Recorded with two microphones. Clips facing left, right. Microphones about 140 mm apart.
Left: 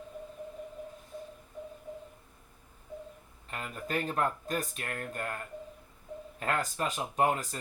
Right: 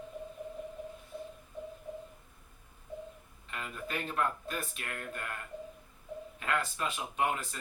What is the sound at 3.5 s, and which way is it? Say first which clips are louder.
Speech: left 4 dB; 40° left (ahead or behind).